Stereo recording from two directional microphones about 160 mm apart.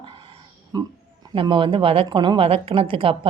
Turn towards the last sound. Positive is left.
turn(degrees=-35)  # may be behind; listen again after turning